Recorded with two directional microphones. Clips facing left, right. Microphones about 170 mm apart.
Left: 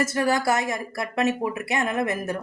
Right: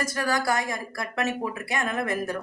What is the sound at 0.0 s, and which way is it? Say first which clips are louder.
Speech: left 4 dB; 25° left (ahead or behind).